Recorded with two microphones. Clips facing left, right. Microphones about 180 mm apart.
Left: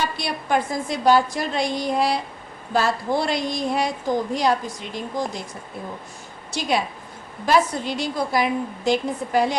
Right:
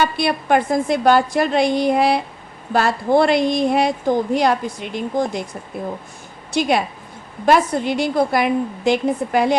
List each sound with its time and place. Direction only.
0.0 s a woman's voice: 60° right (ahead or behind)
6.5 s a woman's voice: 60° right (ahead or behind)